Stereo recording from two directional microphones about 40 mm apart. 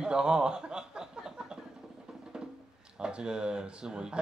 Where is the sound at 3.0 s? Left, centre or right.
Right.